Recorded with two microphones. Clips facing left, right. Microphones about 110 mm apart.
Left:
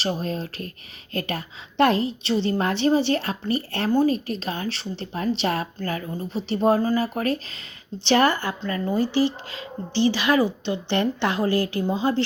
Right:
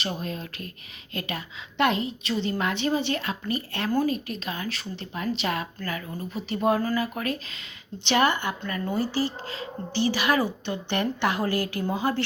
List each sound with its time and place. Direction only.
0.0 s a woman's voice: 35° left (ahead or behind)
10.7 s a woman's voice: 25° left (ahead or behind)